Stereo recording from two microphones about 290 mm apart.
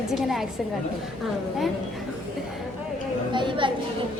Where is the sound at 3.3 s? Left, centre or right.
Centre.